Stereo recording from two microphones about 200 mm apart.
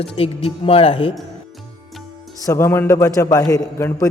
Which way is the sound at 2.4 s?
15° left (ahead or behind).